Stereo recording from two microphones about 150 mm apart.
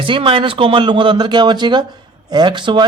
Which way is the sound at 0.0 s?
35° right (ahead or behind).